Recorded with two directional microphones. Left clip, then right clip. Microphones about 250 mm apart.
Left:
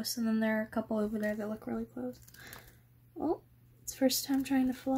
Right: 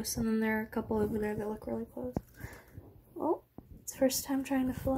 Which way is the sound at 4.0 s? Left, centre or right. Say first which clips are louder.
Even; centre.